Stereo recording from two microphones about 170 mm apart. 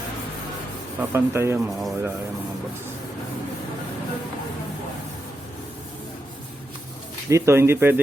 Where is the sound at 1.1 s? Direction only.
15° right (ahead or behind).